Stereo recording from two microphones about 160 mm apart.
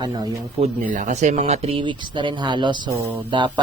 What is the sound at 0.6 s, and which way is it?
A man's voice, 50° right (ahead or behind).